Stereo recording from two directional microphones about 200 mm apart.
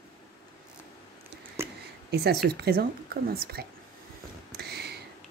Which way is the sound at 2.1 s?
55° right (ahead or behind).